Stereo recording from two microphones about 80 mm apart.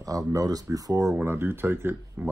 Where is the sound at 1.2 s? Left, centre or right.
Right.